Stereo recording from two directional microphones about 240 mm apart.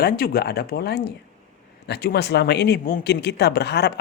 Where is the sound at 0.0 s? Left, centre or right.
Left.